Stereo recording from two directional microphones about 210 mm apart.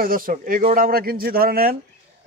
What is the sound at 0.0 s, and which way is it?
Speech, 45° right (ahead or behind).